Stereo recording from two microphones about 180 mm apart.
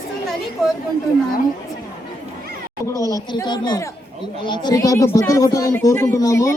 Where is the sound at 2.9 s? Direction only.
20° left (ahead or behind).